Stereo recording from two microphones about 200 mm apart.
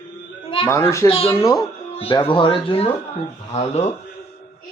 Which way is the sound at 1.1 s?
30° left (ahead or behind).